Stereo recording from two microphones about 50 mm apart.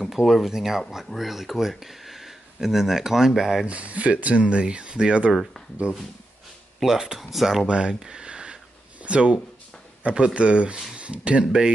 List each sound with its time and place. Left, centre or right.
0.0 s speech: centre
3.6 s speech: right
5.3 s speech: centre
6.8 s speech: centre
7.6 s speech: centre